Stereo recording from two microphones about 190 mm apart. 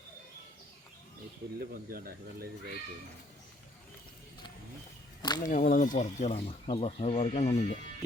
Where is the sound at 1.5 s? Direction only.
50° right (ahead or behind).